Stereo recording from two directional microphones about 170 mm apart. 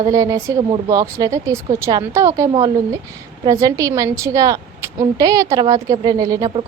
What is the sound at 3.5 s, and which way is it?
A woman's voice, 20° right (ahead or behind).